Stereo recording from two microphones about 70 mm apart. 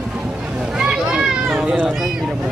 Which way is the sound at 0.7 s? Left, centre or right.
Centre.